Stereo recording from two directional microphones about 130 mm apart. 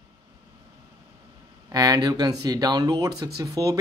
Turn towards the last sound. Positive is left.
turn(degrees=-25)  # may be behind; listen again after turning